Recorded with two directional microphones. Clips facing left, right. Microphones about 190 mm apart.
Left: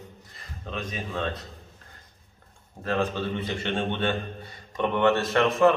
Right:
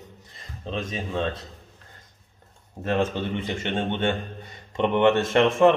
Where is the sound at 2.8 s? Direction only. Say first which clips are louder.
Right 2 dB; 20° right (ahead or behind).